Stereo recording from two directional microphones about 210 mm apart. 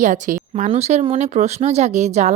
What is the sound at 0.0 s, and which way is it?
A woman's voice, 40° right (ahead or behind).